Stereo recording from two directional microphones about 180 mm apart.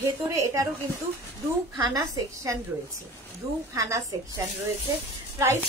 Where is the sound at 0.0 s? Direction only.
15° right (ahead or behind).